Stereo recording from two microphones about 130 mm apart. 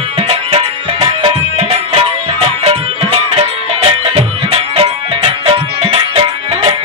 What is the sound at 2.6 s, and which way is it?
Music, 50° right (ahead or behind).